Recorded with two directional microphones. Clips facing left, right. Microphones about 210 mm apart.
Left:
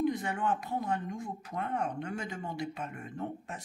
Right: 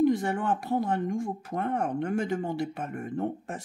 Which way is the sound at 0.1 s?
50° right (ahead or behind).